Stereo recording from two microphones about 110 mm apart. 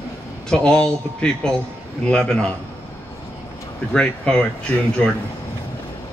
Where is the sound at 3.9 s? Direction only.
10° left (ahead or behind).